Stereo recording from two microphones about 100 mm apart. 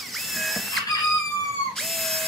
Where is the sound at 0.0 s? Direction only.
Centre (ahead or behind).